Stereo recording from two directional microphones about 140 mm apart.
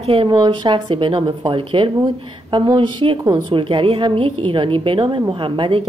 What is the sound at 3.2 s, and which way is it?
Speech, 25° right (ahead or behind).